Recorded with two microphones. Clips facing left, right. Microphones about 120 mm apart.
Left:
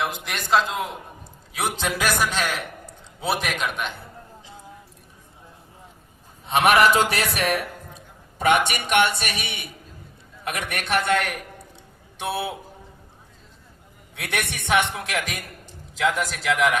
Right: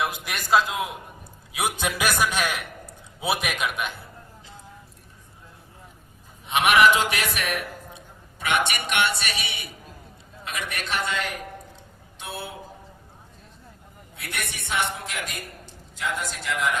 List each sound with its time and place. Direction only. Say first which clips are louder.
0.0 s a man's voice: left 1 dB; 10° right (ahead or behind)
6.5 s a man's voice: left 1 dB; 35° left (ahead or behind); by 12.5 s 70° left (ahead or behind)
14.2 s a man's voice: left 6 dB; 70° left (ahead or behind)
14.9 s a man's voice: left 5 dB; 90° left